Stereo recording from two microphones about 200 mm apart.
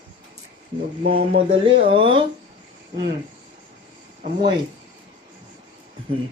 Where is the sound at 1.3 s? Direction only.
50° right (ahead or behind).